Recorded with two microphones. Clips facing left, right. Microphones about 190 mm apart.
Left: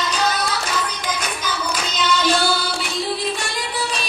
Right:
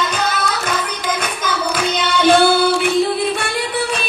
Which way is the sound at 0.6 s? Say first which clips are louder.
Right 4 dB; 55° right (ahead or behind).